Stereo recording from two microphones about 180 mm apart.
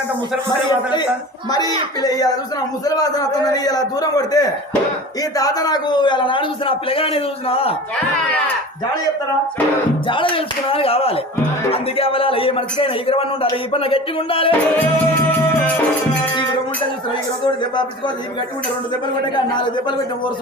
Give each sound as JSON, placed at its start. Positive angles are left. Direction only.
{"t": 1.5, "sound": "a man's voice", "side_deg": 20}
{"t": 10.1, "sound": "a man's voice", "side_deg": 30}
{"t": 17.4, "sound": "a man's voice", "side_deg": 25}